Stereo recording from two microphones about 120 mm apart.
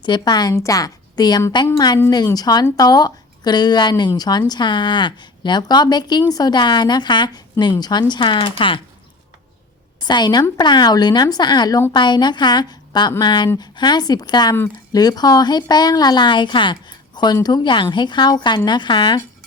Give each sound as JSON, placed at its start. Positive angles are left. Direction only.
{"t": 0.0, "sound": "speech", "side_deg": 40}
{"t": 10.0, "sound": "a woman's voice", "side_deg": 35}